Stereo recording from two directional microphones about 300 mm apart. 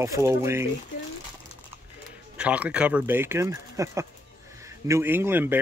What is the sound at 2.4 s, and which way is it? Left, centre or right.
Speech, centre.